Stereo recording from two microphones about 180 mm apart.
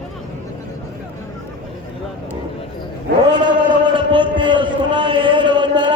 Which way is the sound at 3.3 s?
25° right (ahead or behind).